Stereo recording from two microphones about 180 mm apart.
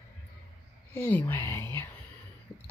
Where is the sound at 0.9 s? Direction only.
10° left (ahead or behind).